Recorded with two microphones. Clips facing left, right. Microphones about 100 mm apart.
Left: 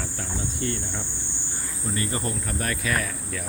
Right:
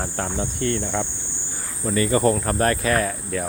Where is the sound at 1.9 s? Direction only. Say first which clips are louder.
Right 11 dB; 90° right; by 3.5 s 45° right (ahead or behind).